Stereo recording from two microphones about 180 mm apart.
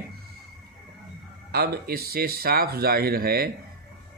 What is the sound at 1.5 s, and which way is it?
A man's voice, 60° right (ahead or behind).